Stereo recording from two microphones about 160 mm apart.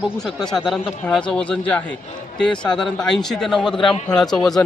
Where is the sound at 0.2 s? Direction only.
5° left (ahead or behind).